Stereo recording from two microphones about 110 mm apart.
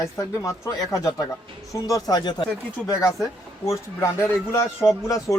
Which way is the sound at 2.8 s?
30° left (ahead or behind).